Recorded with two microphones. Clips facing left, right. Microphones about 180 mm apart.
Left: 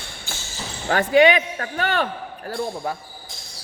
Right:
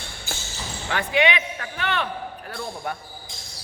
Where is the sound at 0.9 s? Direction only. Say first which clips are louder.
Left 7 dB; 45° left (ahead or behind).